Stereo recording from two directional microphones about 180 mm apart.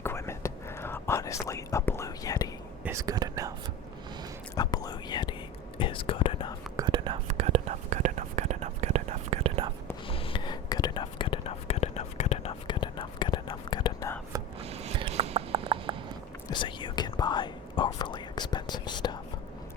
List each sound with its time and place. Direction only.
0.0 s whispering: 15° left (ahead or behind)
2.8 s speech: 20° right (ahead or behind)
4.5 s whispering: 20° left (ahead or behind)
6.7 s whispering: 25° right (ahead or behind)
7.3 s whispering: 35° right (ahead or behind)
10.1 s whispering: 30° left (ahead or behind)
14.6 s a sound: 35° right (ahead or behind)
16.5 s whispering: 25° left (ahead or behind)